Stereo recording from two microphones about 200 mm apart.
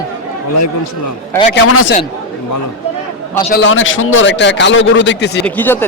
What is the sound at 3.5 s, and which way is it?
A man's voice, 65° left (ahead or behind).